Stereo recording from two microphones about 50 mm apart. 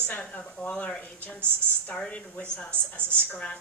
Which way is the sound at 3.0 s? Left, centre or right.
Right.